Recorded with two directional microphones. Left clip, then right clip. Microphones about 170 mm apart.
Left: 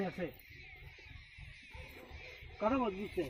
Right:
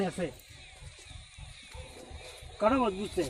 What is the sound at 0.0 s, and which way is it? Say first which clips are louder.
Speech: right 7 dB; 15° right (ahead or behind).